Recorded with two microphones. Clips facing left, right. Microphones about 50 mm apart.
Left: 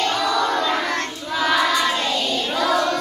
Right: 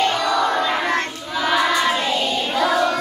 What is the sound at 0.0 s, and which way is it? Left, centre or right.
Child singing, centre.